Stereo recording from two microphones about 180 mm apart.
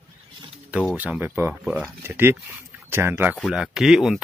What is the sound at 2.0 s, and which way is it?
Speech, 10° right (ahead or behind).